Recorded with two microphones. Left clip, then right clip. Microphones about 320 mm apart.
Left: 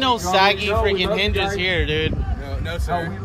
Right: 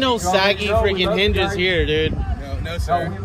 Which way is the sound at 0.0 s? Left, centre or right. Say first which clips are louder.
Left 1 dB; centre.